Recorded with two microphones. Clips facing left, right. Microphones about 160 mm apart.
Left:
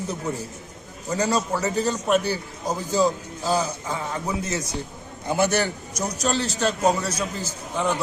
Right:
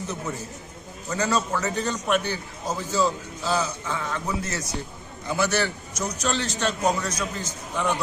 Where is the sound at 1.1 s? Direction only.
35° left (ahead or behind).